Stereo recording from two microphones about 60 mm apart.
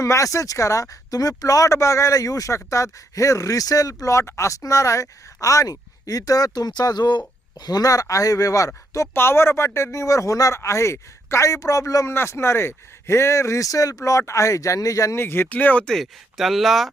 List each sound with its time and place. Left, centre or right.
0.0 s speech: left
9.1 s speech: left
10.6 s a man's voice: left
11.4 s speech: left
12.0 s a man's voice: left
15.1 s speech: left
15.4 s speech: left
15.9 s speech: centre